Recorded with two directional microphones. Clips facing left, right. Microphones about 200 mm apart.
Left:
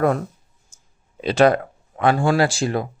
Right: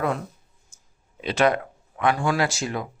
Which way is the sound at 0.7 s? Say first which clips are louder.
Left 1 dB; 35° left (ahead or behind).